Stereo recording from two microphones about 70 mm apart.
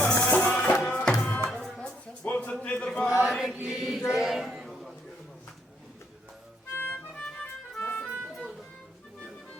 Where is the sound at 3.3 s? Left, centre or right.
Centre.